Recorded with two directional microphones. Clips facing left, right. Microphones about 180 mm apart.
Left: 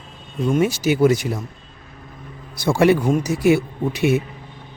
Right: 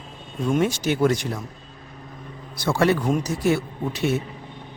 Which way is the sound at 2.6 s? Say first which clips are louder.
Left 5 dB; 10° left (ahead or behind).